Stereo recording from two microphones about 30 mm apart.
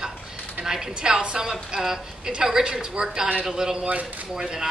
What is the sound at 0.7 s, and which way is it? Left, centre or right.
Speech, centre.